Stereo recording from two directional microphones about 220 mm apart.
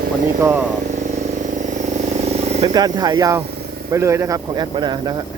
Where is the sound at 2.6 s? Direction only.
20° right (ahead or behind).